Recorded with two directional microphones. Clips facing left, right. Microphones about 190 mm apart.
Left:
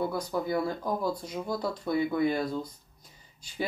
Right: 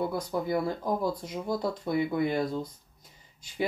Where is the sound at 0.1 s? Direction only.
20° right (ahead or behind).